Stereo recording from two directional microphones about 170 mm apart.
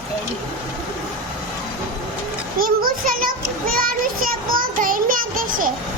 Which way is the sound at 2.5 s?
55° right (ahead or behind).